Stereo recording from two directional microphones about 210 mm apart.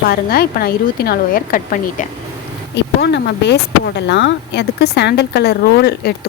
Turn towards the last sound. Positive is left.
turn(degrees=50)  # may be behind; listen again after turning